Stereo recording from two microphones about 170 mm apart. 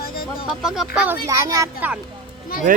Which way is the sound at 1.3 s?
20° right (ahead or behind).